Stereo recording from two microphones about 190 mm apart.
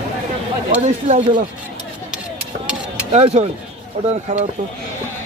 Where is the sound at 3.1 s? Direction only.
35° right (ahead or behind).